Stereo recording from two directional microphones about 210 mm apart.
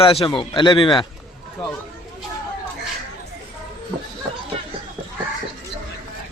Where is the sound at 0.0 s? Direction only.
25° left (ahead or behind).